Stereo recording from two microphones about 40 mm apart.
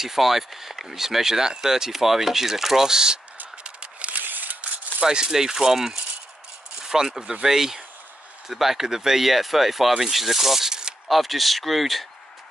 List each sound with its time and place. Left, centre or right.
0.0 s speech: centre
3.6 s a sound: right
4.2 s scissors: right
5.0 s speech: centre
11.1 s speech: centre